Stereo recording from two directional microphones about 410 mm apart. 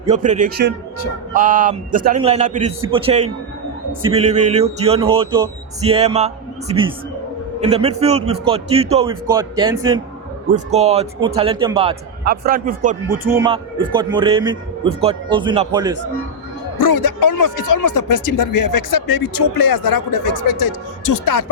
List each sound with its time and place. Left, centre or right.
0.0 s speech: centre
13.1 s speech: centre
16.7 s speech: left